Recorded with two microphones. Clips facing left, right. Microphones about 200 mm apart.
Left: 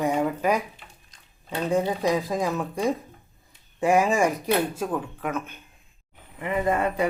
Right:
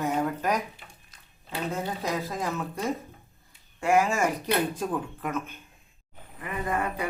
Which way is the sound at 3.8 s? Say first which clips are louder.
Left 3 dB; 15° left (ahead or behind).